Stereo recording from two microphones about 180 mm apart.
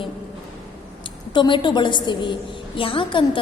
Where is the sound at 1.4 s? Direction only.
25° left (ahead or behind).